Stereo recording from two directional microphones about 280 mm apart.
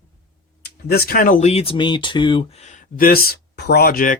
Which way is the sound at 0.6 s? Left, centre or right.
Left.